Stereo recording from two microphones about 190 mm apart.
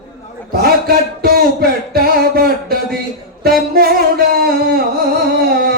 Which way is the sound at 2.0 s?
55° right (ahead or behind).